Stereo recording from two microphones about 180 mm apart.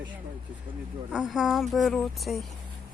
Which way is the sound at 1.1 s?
5° right (ahead or behind).